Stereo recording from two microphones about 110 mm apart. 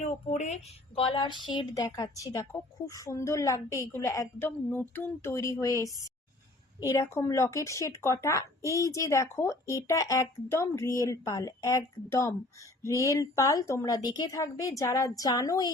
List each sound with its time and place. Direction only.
0.0 s a woman's voice: 90° left
0.9 s a sound: 50° left (ahead or behind)
1.7 s speech: 30° left (ahead or behind)
4.7 s speech: 15° left (ahead or behind)
6.9 s a woman's voice: 25° left (ahead or behind)